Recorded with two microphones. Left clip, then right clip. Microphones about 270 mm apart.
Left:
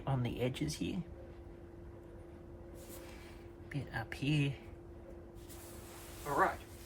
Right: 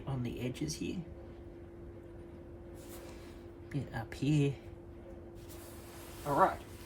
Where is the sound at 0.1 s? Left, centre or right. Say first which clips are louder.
Left 3 dB; centre.